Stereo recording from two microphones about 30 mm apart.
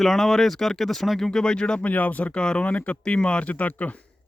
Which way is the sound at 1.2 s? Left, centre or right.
Centre.